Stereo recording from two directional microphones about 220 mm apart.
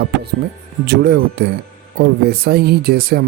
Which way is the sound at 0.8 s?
50° right (ahead or behind).